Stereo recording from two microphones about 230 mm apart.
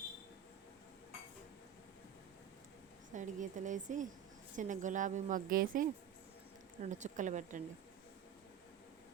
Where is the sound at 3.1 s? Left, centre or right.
Right.